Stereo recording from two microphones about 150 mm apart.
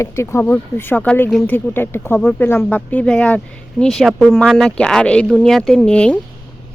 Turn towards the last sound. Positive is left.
turn(degrees=5)  # may be behind; listen again after turning